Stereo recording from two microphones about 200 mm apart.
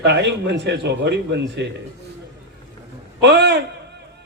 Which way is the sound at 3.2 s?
55° right (ahead or behind).